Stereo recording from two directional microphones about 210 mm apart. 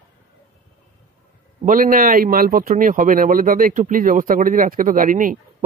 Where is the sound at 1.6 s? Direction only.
40° right (ahead or behind).